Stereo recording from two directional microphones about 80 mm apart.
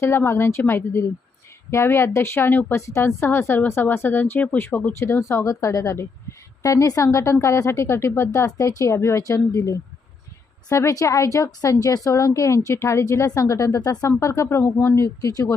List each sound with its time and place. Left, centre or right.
0.3 s a woman's voice: left
14.2 s a woman's voice: left